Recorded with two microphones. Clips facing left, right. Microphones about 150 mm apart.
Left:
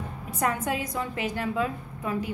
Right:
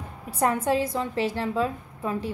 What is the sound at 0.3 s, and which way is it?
A woman's voice, 30° right (ahead or behind).